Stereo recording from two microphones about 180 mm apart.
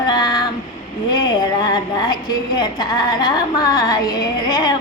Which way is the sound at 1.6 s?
25° left (ahead or behind).